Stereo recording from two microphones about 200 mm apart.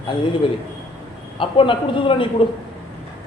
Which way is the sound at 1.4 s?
25° left (ahead or behind).